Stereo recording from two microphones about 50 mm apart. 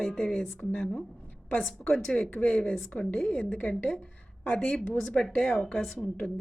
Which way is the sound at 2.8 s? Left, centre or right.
Left.